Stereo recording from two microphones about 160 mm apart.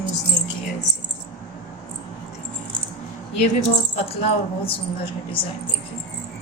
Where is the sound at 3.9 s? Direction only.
40° left (ahead or behind).